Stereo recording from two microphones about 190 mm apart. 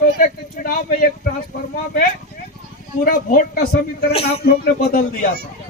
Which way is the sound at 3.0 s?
45° left (ahead or behind).